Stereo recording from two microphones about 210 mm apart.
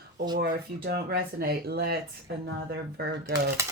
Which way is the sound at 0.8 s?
45° right (ahead or behind).